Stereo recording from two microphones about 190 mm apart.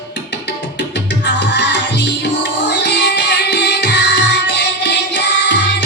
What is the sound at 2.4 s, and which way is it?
Music, 65° left (ahead or behind).